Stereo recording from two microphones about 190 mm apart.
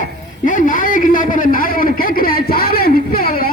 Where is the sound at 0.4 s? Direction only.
45° left (ahead or behind).